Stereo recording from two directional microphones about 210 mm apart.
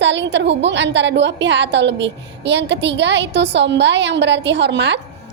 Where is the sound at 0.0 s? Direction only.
55° right (ahead or behind).